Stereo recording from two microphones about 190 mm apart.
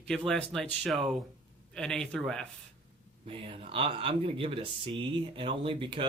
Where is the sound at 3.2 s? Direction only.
30° right (ahead or behind).